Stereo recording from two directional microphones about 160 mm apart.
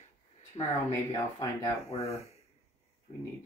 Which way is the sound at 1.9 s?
40° left (ahead or behind).